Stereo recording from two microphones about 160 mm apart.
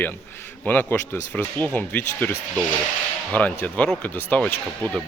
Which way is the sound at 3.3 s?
10° left (ahead or behind).